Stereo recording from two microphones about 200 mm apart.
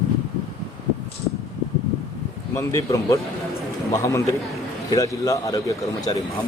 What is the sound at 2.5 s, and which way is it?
Speech, 15° left (ahead or behind).